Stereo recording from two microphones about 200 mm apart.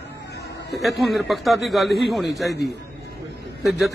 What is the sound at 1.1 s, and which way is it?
Speech, centre (ahead or behind).